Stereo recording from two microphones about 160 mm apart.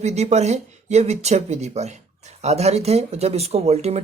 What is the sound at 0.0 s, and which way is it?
Speech, 40° right (ahead or behind).